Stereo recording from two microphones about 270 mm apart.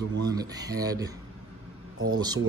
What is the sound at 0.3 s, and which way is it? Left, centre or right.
Speech, centre.